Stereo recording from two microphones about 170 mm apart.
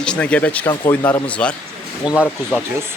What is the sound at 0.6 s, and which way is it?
Speech, 25° left (ahead or behind).